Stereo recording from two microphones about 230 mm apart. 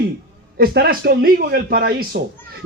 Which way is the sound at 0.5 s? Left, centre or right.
Right.